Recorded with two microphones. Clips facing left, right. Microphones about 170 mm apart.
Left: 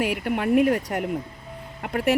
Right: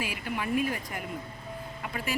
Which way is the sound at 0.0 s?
65° left (ahead or behind).